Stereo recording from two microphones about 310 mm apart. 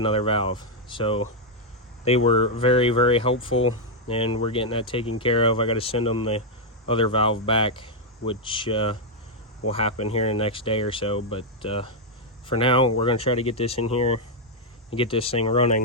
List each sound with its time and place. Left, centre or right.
0.0 s speech: centre